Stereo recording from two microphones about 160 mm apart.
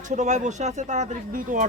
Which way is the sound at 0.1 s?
45° right (ahead or behind).